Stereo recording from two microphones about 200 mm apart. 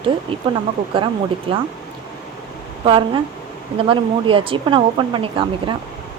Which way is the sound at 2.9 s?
25° right (ahead or behind).